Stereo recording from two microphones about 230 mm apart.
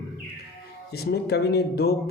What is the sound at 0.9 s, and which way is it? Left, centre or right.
Speech, left.